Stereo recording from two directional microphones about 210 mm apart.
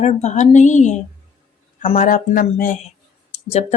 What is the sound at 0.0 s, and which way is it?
Speech, 35° left (ahead or behind).